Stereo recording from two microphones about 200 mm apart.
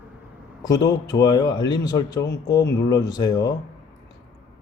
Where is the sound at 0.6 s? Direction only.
20° left (ahead or behind).